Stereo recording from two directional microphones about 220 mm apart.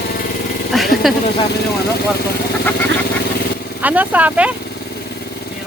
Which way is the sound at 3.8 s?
5° right (ahead or behind).